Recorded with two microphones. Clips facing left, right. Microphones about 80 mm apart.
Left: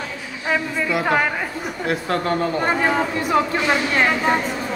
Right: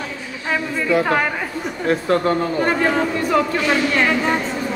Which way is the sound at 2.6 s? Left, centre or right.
Centre.